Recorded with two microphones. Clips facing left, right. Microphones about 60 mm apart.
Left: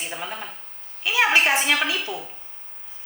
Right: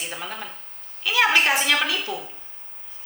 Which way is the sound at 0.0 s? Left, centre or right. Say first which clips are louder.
Left 1 dB; centre.